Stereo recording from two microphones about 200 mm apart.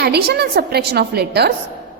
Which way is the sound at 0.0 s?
55° right (ahead or behind).